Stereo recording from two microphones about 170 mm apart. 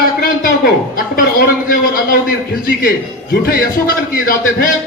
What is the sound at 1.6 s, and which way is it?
Speech, 55° left (ahead or behind).